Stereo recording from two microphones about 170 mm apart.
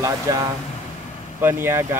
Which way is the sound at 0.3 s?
20° right (ahead or behind).